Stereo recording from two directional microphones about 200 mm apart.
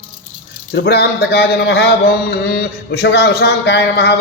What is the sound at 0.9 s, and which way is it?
Speech, 55° left (ahead or behind).